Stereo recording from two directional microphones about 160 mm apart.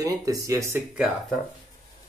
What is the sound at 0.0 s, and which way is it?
Speech, 20° right (ahead or behind).